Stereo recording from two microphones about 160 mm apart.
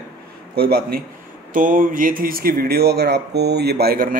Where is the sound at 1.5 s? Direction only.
60° right (ahead or behind).